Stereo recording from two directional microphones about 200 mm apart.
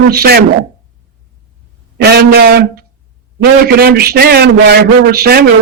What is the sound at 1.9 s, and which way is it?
A man's voice, 55° right (ahead or behind).